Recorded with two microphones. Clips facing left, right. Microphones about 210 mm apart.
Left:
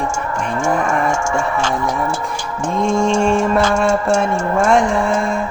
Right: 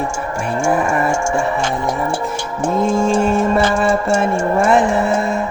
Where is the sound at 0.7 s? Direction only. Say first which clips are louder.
Right 1 dB; 5° right (ahead or behind).